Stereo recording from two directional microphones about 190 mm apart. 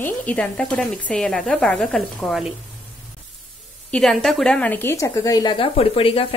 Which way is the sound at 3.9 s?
Centre (ahead or behind).